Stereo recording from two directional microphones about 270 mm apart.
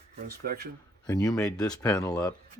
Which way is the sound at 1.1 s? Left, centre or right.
Centre.